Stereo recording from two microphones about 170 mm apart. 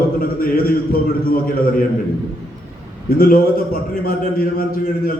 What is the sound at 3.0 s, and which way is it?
Speech, 60° left (ahead or behind).